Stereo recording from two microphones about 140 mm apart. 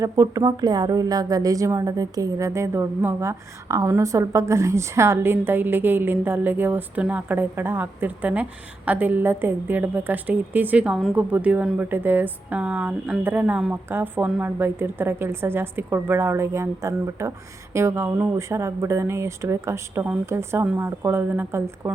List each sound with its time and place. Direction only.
0.0 s a woman's voice: 25° right (ahead or behind)